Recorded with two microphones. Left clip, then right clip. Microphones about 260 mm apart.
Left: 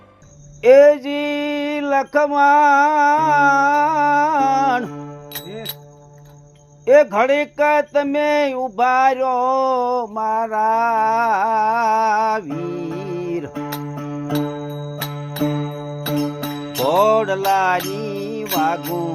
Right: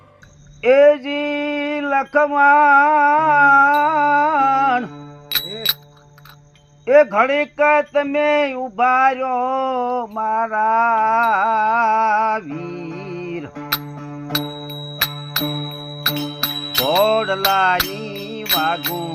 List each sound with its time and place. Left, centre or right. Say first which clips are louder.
0.6 s a sound: left 2 dB; centre
5.3 s music: right 12 dB; right
6.8 s speech: even; centre
13.1 s music: left 4 dB; left
13.3 s music: left 4 dB; left
13.9 s music: left 1 dB; left
15.4 s mantra: even; left
16.8 s speech: left 2 dB; centre
18.1 s mantra: right 1 dB; centre